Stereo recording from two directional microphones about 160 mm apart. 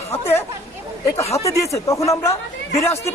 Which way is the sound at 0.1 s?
15° left (ahead or behind).